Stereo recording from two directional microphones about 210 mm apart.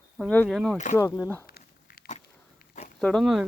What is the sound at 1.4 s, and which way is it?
Walk, 45° left (ahead or behind).